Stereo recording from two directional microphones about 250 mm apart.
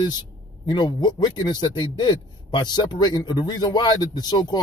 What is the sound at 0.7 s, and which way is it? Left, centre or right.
A man's voice, centre.